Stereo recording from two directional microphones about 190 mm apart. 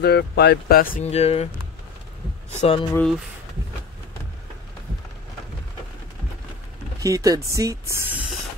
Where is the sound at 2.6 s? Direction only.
30° left (ahead or behind).